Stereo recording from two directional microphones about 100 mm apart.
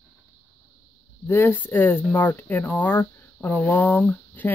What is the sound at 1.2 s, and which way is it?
Speech, 20° left (ahead or behind).